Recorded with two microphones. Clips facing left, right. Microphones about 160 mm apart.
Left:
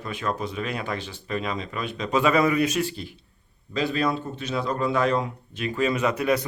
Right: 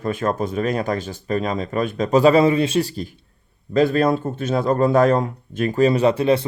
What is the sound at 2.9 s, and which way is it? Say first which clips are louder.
Speech: right 7 dB; 45° right (ahead or behind).